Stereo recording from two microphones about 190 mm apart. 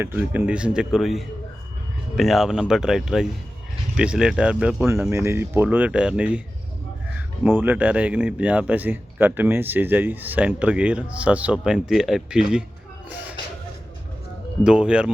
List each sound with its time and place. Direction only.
0.0 s speech: 10° right (ahead or behind)
7.4 s speech: 10° right (ahead or behind)
14.6 s speech: 5° right (ahead or behind)